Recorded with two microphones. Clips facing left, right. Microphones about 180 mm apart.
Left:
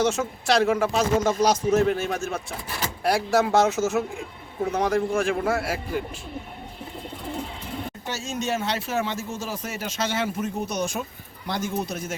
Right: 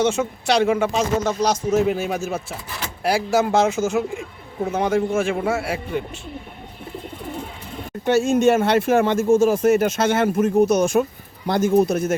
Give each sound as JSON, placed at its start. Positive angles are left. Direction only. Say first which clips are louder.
{"t": 0.0, "sound": "a man's voice", "louder": "right 3 dB", "side_deg": 0}
{"t": 1.9, "sound": "a man's voice", "louder": "right 3 dB", "side_deg": -10}
{"t": 8.0, "sound": "speech", "louder": "right 16 dB", "side_deg": -55}